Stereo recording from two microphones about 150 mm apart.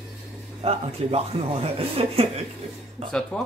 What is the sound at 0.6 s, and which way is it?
Speech, 40° right (ahead or behind).